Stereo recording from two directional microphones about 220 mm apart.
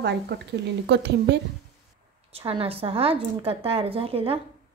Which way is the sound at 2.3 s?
25° right (ahead or behind).